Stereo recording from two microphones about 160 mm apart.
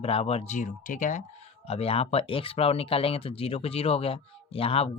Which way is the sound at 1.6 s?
40° left (ahead or behind).